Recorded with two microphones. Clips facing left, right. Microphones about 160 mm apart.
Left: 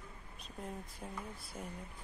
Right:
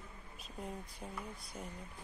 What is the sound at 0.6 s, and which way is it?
Speech, centre (ahead or behind).